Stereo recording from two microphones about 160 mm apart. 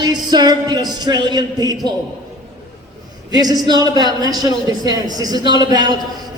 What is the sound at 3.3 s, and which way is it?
A woman's voice, 25° right (ahead or behind).